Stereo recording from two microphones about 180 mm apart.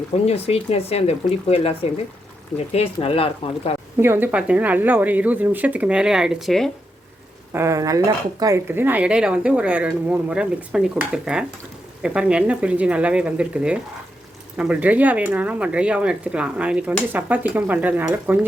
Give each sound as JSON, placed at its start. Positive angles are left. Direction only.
{"t": 0.3, "sound": "speech", "side_deg": 35}
{"t": 4.0, "sound": "speech", "side_deg": -10}
{"t": 7.5, "sound": "speech", "side_deg": -15}